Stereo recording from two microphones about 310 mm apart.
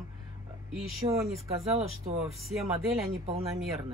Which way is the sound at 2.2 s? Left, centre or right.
Centre.